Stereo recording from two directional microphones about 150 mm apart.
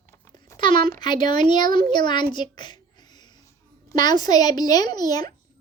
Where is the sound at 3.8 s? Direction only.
25° left (ahead or behind).